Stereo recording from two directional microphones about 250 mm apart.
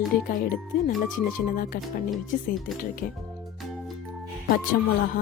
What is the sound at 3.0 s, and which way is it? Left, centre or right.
Speech, left.